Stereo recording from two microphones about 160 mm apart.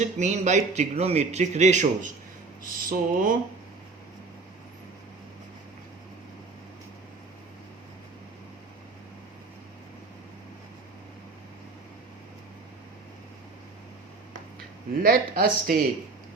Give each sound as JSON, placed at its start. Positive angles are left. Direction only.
{"t": 0.0, "sound": "a man's voice", "side_deg": -50}
{"t": 2.6, "sound": "a sound", "side_deg": -60}
{"t": 15.0, "sound": "speech", "side_deg": -65}